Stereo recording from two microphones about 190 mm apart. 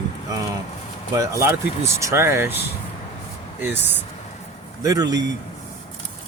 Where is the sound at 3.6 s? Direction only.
10° right (ahead or behind).